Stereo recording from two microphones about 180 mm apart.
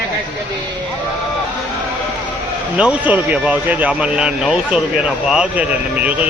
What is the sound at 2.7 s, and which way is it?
Speech, 5° right (ahead or behind).